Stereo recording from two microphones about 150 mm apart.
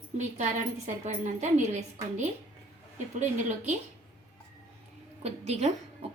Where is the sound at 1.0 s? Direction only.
55° right (ahead or behind).